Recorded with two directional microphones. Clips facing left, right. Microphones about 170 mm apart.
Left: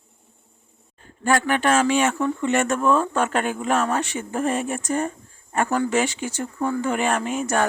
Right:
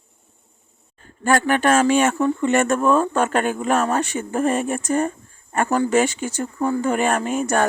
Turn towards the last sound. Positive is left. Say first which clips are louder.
# right 3 dB
turn(degrees=-45)  # may be behind; listen again after turning